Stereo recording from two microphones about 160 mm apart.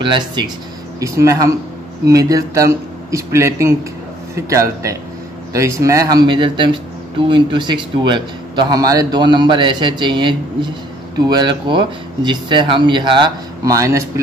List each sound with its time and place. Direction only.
0.0 s speech: 30° right (ahead or behind)
0.9 s speech: 20° right (ahead or behind)